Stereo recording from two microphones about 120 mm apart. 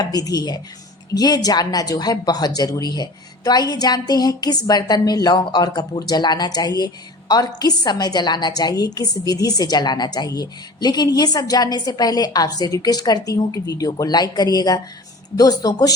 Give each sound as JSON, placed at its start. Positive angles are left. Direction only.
{"t": 0.0, "sound": "speech", "side_deg": 30}